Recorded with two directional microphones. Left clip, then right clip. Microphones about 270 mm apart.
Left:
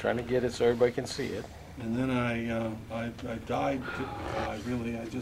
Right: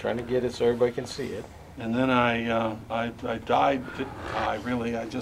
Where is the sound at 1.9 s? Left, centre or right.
Right.